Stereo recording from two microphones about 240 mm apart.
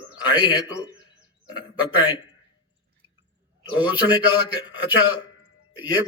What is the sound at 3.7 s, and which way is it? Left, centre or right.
Speech, centre.